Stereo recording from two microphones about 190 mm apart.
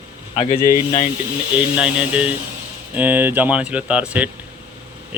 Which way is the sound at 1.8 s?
5° right (ahead or behind).